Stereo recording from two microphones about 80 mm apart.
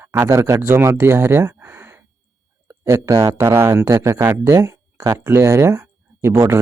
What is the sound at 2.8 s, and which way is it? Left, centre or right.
Speech, right.